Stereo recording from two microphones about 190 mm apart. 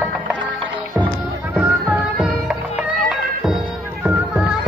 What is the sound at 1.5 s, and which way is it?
Music, 5° right (ahead or behind).